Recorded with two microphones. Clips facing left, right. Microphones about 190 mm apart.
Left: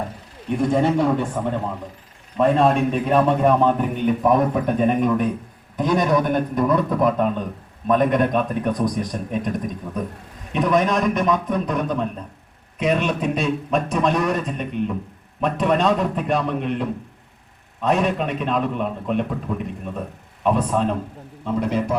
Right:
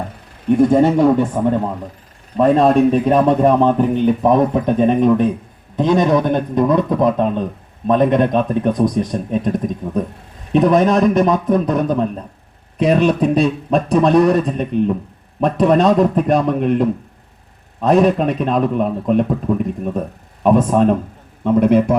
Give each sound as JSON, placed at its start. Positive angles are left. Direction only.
{"t": 2.4, "sound": "a man's voice", "side_deg": -35}
{"t": 21.4, "sound": "a man's voice", "side_deg": -60}